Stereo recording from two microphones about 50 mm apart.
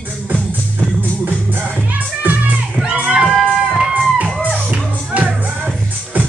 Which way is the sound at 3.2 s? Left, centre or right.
Centre.